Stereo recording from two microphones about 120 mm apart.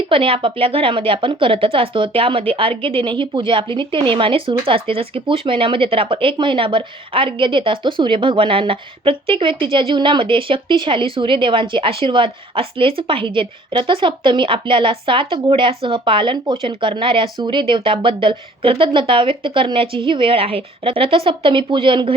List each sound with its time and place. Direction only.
0.1 s a woman's voice: 45° right (ahead or behind)